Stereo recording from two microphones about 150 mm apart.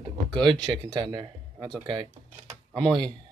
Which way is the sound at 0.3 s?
30° right (ahead or behind).